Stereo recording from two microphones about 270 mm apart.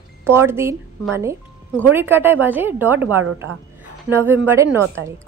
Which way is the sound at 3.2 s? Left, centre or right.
Right.